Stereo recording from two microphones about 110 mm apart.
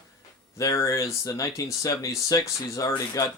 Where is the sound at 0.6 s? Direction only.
25° left (ahead or behind).